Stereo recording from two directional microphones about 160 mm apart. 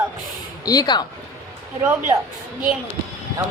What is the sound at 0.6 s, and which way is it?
Speech, 25° left (ahead or behind).